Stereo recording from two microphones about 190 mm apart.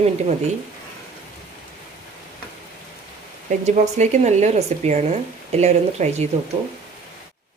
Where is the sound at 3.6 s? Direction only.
40° right (ahead or behind).